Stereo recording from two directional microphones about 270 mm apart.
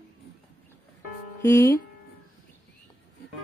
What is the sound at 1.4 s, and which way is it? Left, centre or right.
Speech, centre.